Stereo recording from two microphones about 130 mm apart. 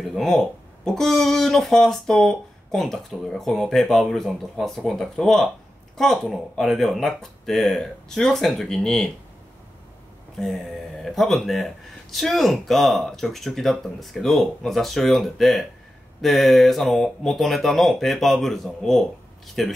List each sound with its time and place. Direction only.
0.0 s speech: centre (ahead or behind)
10.4 s speech: centre (ahead or behind)